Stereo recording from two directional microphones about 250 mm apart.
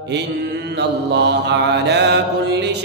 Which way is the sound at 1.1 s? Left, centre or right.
Right.